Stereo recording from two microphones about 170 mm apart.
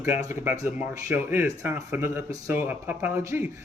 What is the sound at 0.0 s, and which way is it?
Speech, 15° right (ahead or behind).